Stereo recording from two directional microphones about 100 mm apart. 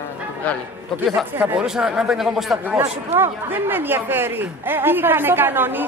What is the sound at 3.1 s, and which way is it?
Speech, 20° right (ahead or behind).